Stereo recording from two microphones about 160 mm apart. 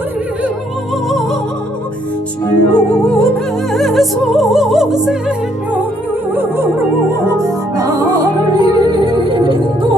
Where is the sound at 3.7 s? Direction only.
Centre (ahead or behind).